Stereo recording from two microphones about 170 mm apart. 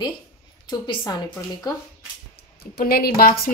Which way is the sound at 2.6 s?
65° left (ahead or behind).